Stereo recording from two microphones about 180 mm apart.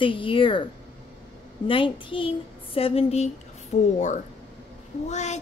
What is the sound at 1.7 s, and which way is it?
Child singing, 30° left (ahead or behind).